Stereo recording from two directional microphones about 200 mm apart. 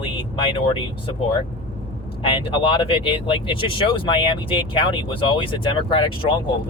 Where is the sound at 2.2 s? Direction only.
25° left (ahead or behind).